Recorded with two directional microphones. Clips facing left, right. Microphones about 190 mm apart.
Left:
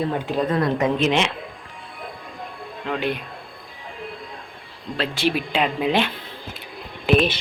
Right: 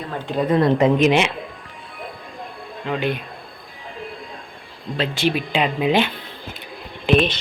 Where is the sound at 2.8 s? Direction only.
Centre (ahead or behind).